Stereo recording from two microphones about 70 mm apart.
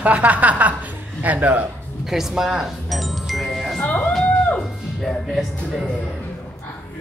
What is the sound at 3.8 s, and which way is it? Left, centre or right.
Music, left.